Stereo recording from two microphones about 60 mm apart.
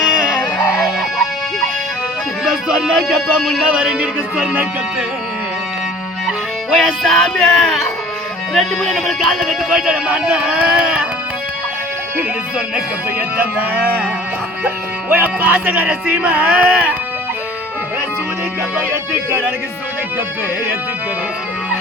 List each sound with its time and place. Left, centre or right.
0.0 s music: centre
2.4 s speech: centre
6.7 s music: centre
10.1 s speech: centre
13.1 s speech: right
15.1 s speech: right